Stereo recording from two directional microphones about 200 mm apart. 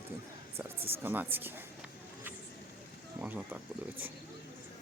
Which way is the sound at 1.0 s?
10° right (ahead or behind).